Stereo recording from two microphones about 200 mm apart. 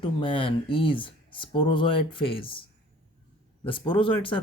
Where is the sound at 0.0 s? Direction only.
25° left (ahead or behind).